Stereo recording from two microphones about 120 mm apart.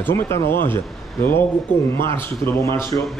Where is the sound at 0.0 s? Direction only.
20° left (ahead or behind).